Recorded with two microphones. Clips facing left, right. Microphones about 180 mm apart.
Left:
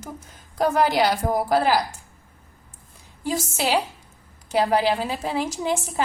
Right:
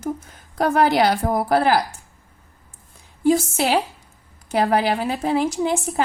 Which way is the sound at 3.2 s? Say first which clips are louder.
Right 7 dB; 55° right (ahead or behind).